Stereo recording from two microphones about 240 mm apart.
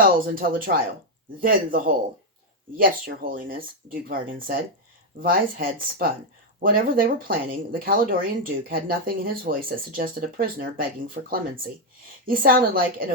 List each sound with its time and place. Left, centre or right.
0.0 s speech: right